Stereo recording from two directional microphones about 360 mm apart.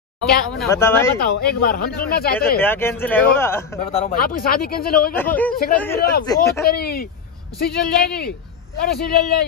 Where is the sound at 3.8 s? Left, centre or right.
Left.